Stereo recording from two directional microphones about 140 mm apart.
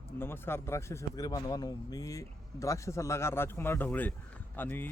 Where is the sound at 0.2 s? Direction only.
15° left (ahead or behind).